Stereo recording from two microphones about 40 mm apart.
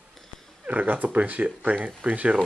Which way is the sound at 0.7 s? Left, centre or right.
Right.